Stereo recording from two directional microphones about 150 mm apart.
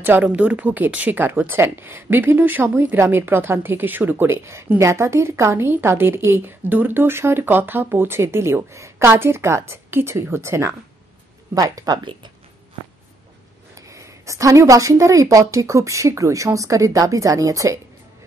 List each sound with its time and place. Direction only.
0.0 s speech: 10° right (ahead or behind); by 12.3 s 30° right (ahead or behind)
13.7 s speech: 20° right (ahead or behind)